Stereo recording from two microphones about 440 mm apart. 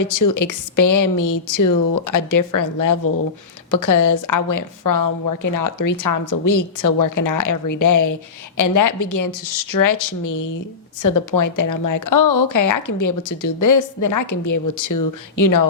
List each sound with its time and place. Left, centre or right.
0.0 s a woman's voice: left